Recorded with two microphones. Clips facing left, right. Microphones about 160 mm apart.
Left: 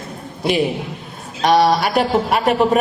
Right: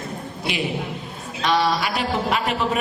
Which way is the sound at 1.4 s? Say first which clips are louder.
Left 7 dB; 50° left (ahead or behind).